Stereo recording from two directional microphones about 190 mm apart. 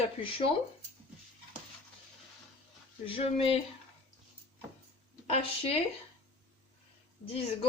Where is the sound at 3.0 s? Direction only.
30° left (ahead or behind).